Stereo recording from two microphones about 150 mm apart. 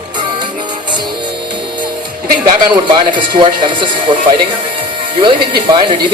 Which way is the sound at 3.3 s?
35° right (ahead or behind).